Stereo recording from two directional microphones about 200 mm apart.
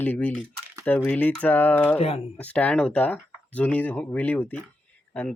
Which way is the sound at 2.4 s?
5° left (ahead or behind).